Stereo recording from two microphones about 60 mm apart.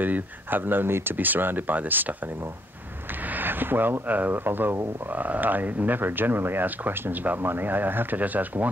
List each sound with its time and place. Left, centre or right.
0.0 s speech: right
3.3 s speech: right